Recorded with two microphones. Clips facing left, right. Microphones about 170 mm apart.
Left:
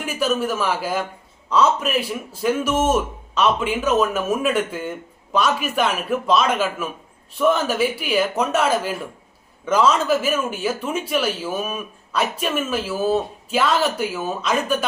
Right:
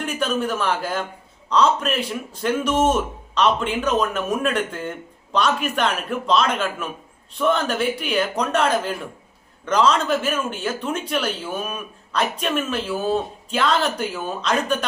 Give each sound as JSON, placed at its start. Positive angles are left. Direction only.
{"t": 0.0, "sound": "speech", "side_deg": 5}